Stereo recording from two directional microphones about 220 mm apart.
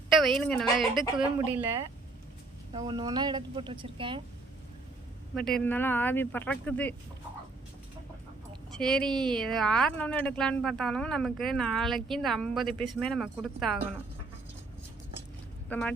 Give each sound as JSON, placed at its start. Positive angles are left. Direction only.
{"t": 0.1, "sound": "speech", "side_deg": 0}
{"t": 2.7, "sound": "speech", "side_deg": -20}
{"t": 5.3, "sound": "speech", "side_deg": 5}
{"t": 8.8, "sound": "speech", "side_deg": 0}
{"t": 15.7, "sound": "speech", "side_deg": 5}